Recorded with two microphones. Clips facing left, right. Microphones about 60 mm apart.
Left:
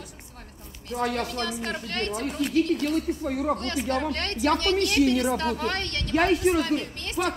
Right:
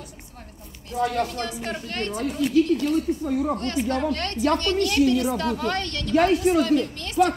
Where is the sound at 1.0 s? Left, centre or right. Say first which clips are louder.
Right 3 dB; left.